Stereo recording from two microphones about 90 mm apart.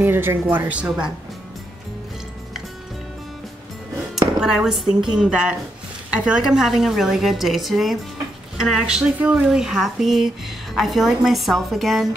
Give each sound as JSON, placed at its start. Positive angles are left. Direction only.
{"t": 0.0, "sound": "speech", "side_deg": -25}
{"t": 4.4, "sound": "a woman's voice", "side_deg": -5}
{"t": 9.6, "sound": "a woman's voice", "side_deg": -5}